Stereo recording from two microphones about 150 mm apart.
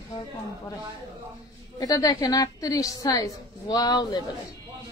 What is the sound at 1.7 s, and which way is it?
A woman's voice, 25° left (ahead or behind).